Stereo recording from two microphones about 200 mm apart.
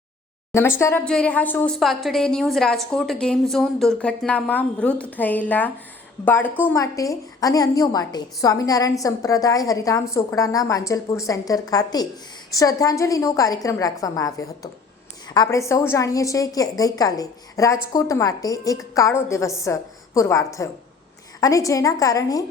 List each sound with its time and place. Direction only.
0.5 s a woman's voice: 15° left (ahead or behind)